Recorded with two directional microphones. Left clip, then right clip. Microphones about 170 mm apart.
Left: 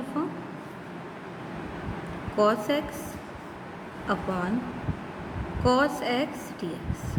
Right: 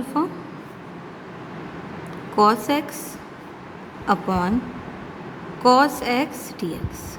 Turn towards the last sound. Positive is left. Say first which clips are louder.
# right 5 dB
turn(degrees=-50)  # may be behind; listen again after turning